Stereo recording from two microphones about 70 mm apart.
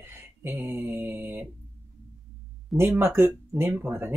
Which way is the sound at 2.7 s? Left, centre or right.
Right.